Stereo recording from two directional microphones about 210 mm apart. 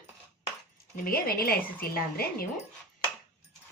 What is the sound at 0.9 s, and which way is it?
Speech, 45° left (ahead or behind).